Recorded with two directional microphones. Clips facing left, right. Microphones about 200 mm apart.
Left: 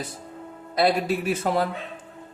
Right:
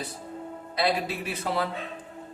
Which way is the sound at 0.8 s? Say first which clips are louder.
Left 5 dB; 45° left (ahead or behind).